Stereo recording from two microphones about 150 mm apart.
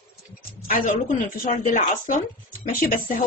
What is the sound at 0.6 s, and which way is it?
Speech, 65° left (ahead or behind).